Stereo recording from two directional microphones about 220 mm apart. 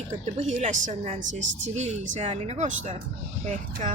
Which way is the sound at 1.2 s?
60° right (ahead or behind).